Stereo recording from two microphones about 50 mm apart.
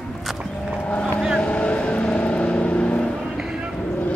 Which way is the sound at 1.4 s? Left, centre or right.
Left.